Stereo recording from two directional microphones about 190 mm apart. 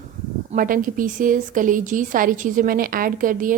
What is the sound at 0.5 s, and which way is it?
A woman's voice, 45° right (ahead or behind).